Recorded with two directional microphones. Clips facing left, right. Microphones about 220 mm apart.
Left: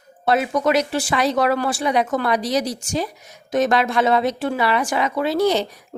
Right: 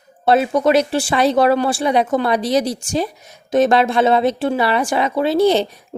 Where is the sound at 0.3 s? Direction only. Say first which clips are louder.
Right 4 dB; 30° right (ahead or behind).